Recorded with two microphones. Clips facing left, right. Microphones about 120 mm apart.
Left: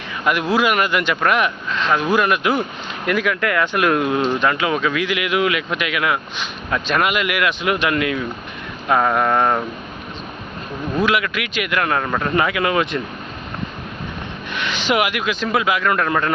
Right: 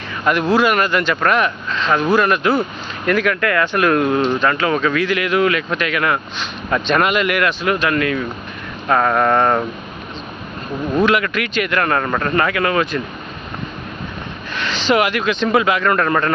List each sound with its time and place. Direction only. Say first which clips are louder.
0.3 s speech: right 3 dB; 10° left (ahead or behind)
6.7 s a sound: right 3 dB; 5° left (ahead or behind)
7.6 s speech: right 2 dB; 20° left (ahead or behind)
8.9 s a sound: right 2 dB; 10° left (ahead or behind)
11.0 s speech: right 2 dB; 5° left (ahead or behind)
12.3 s speech: right 1 dB; 15° left (ahead or behind)
14.5 s speech: right 3 dB; 15° left (ahead or behind)